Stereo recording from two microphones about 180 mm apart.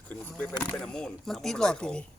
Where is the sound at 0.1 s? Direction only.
10° left (ahead or behind).